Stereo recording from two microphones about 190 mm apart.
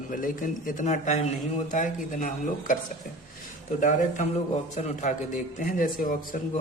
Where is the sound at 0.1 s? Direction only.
45° left (ahead or behind).